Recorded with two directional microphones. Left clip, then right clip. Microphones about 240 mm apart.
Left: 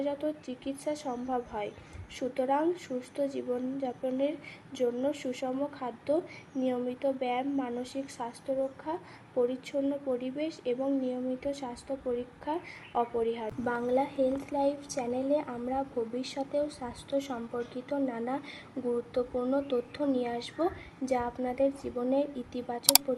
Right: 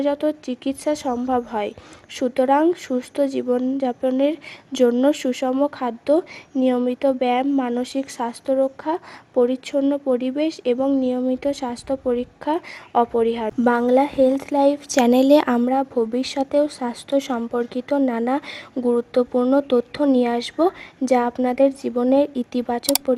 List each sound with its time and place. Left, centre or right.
0.0 s speech: right